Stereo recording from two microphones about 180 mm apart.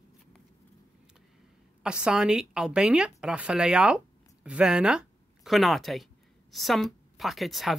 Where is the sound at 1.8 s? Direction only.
5° right (ahead or behind).